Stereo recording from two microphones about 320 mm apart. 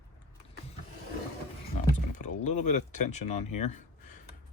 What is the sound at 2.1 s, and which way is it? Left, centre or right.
Speech, left.